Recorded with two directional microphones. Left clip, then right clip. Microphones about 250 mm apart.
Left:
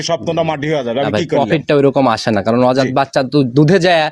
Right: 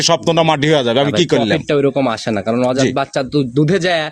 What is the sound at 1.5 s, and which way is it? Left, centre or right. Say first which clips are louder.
Speech: left 3 dB; centre.